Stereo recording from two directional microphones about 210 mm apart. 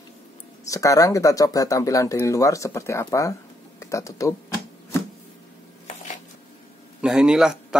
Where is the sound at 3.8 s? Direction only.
15° left (ahead or behind).